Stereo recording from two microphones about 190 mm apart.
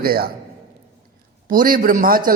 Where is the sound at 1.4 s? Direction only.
50° right (ahead or behind).